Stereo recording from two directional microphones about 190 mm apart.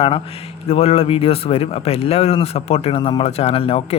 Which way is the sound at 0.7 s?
30° left (ahead or behind).